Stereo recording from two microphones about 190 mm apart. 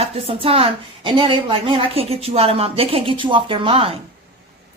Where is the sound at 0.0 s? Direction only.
30° right (ahead or behind).